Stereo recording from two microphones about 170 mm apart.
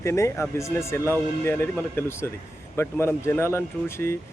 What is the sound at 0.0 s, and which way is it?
Speech, 15° left (ahead or behind).